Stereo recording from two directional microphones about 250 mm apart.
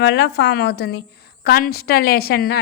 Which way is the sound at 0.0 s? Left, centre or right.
Left.